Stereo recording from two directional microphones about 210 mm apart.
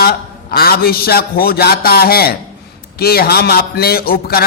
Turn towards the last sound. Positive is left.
turn(degrees=45)  # may be behind; listen again after turning